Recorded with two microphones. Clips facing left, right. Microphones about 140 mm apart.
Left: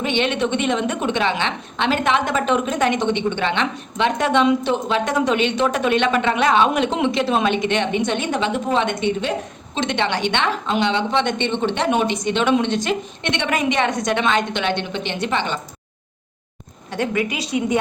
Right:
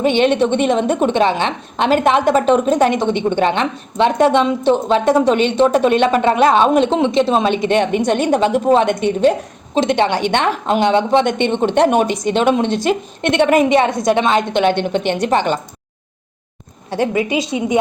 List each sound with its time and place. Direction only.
0.0 s a woman's voice: 40° right (ahead or behind)
13.7 s a woman's voice: 35° right (ahead or behind)
16.9 s a woman's voice: 30° right (ahead or behind)